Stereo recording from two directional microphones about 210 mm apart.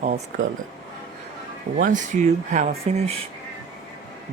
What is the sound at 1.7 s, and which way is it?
Speech, 35° right (ahead or behind).